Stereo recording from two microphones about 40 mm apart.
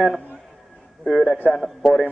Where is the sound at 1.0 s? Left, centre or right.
Centre.